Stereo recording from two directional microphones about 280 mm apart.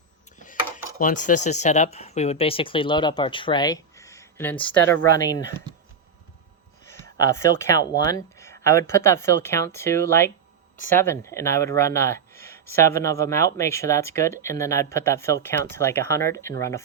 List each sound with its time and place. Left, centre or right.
0.9 s speech: left; by 4.9 s centre
7.0 s speech: centre